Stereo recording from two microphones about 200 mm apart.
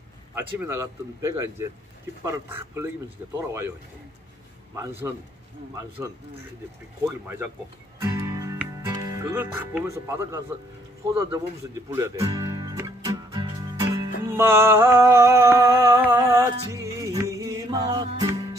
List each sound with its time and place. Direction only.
0.6 s speech: 15° right (ahead or behind)
4.7 s speech: 15° right (ahead or behind)
7.1 s speech: 10° right (ahead or behind)
8.0 s music: 15° right (ahead or behind)
8.8 s speech: 15° right (ahead or behind)
11.1 s music: 15° right (ahead or behind)